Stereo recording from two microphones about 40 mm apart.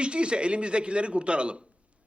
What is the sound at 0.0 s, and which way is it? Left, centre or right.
A man's voice, right.